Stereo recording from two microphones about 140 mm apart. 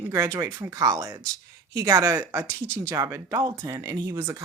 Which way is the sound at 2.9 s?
20° right (ahead or behind).